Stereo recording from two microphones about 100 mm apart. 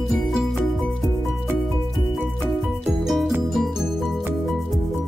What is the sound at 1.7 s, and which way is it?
Music, centre (ahead or behind).